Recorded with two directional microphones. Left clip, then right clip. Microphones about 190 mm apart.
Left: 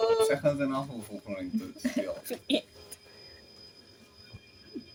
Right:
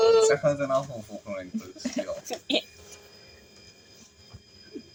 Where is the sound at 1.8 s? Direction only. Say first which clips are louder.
Right 2 dB; 25° left (ahead or behind).